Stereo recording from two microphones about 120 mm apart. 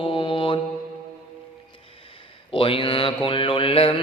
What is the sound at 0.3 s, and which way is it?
Mantra, 45° left (ahead or behind).